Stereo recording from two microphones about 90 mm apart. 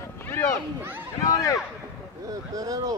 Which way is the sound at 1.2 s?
40° left (ahead or behind).